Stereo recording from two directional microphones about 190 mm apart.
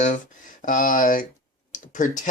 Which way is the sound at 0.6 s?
45° left (ahead or behind).